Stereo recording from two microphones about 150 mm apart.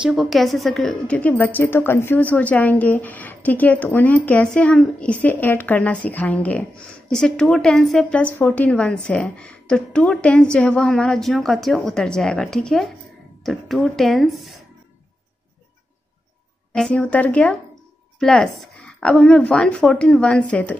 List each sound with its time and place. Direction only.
0.0 s a woman's voice: centre (ahead or behind)
16.7 s a woman's voice: 5° left (ahead or behind)